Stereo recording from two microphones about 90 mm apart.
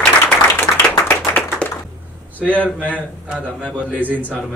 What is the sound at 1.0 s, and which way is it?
Clapping, 15° left (ahead or behind).